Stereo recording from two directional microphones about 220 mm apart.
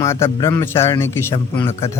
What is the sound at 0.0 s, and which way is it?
A man's voice, 10° left (ahead or behind).